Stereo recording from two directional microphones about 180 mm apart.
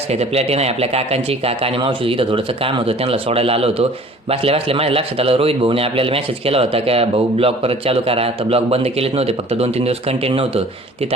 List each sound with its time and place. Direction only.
0.1 s a man's voice: 35° right (ahead or behind)